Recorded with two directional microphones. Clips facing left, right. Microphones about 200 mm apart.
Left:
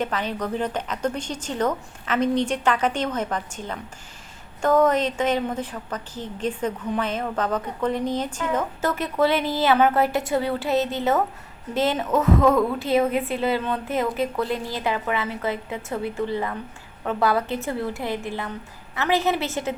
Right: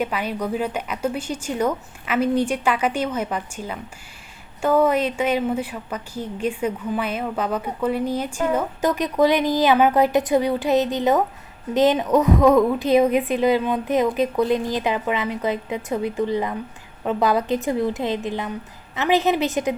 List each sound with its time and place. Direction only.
0.0 s a woman's voice: 10° right (ahead or behind)